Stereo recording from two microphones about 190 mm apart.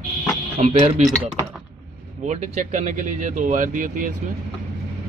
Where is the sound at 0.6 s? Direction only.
35° right (ahead or behind).